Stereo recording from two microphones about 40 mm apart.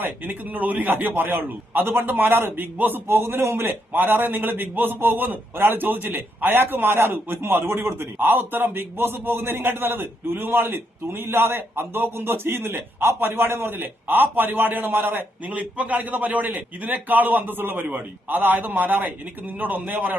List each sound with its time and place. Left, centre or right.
0.0 s a man's voice: right
3.7 s a man's voice: right
5.5 s a man's voice: right
8.3 s a man's voice: right
8.7 s a man's voice: right
15.4 s a man's voice: right
17.8 s a man's voice: right